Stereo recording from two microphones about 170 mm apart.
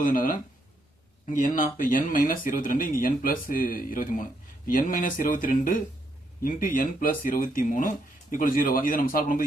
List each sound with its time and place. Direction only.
0.0 s speech: 50° left (ahead or behind)